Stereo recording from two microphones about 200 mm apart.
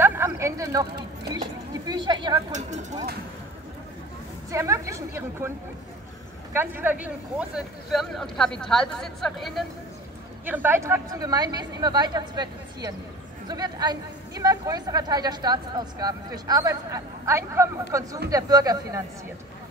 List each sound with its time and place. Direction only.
0.0 s a sound: 15° right (ahead or behind)
1.9 s speech: 20° right (ahead or behind)
2.5 s speech: 35° right (ahead or behind)
4.5 s a woman's voice: 15° right (ahead or behind)
6.5 s speech: 10° right (ahead or behind)
10.4 s a woman's voice: 10° right (ahead or behind)